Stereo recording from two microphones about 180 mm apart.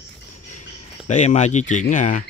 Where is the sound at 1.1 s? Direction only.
40° left (ahead or behind).